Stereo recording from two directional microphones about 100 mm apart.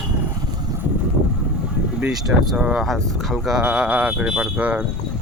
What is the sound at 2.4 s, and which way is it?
Speech, 5° right (ahead or behind).